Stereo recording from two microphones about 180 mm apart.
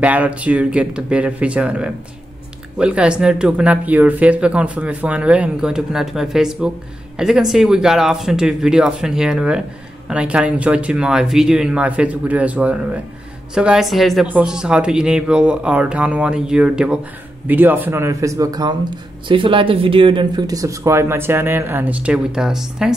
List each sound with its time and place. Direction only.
0.0 s speech: 10° right (ahead or behind)